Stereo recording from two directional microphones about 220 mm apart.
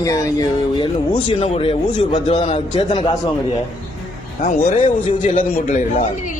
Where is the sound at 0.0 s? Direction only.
15° left (ahead or behind).